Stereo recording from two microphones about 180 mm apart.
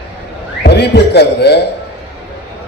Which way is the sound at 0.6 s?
65° left (ahead or behind).